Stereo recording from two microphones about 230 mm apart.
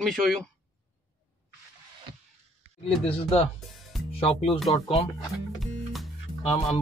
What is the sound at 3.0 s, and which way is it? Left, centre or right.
Speech, left.